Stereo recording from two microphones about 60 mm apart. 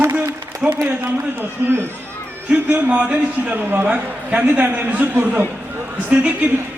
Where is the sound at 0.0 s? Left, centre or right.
Right.